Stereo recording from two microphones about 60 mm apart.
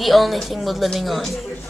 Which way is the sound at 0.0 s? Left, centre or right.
Centre.